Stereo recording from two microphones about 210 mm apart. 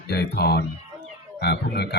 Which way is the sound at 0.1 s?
50° left (ahead or behind).